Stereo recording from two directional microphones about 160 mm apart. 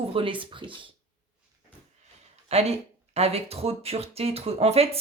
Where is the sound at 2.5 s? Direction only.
40° right (ahead or behind).